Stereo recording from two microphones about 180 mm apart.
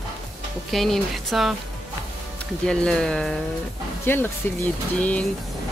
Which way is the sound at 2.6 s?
5° left (ahead or behind).